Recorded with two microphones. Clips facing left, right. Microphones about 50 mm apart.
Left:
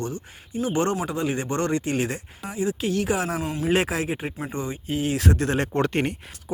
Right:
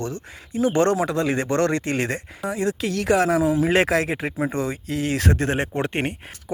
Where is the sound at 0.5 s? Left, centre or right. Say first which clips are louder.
Right 5 dB; right.